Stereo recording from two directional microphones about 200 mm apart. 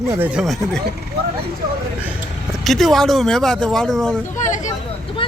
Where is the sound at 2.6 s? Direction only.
Centre (ahead or behind).